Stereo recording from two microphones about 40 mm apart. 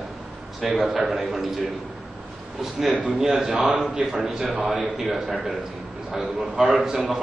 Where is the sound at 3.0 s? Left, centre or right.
Right.